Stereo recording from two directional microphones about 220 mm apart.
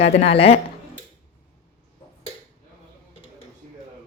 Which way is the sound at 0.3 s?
25° left (ahead or behind).